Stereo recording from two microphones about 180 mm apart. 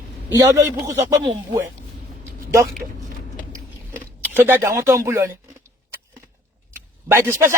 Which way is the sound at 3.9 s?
10° right (ahead or behind).